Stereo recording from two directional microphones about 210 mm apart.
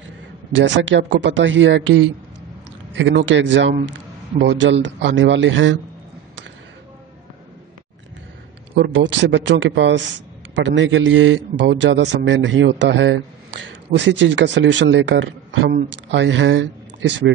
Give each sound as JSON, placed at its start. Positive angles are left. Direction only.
{"t": 0.5, "sound": "speech", "side_deg": -65}
{"t": 8.7, "sound": "speech", "side_deg": -55}